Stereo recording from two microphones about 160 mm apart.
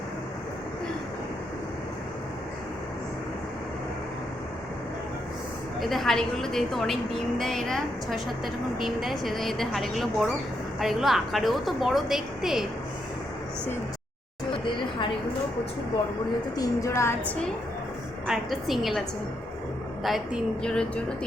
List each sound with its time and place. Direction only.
5.8 s a woman's voice: centre (ahead or behind)
16.6 s a woman's voice: 20° left (ahead or behind)
18.3 s a woman's voice: centre (ahead or behind)
20.1 s a woman's voice: centre (ahead or behind)